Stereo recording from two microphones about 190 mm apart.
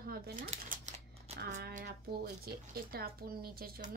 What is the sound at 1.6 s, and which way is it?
Speech, 45° right (ahead or behind).